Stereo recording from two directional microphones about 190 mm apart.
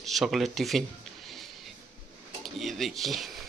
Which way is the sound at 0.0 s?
Centre (ahead or behind).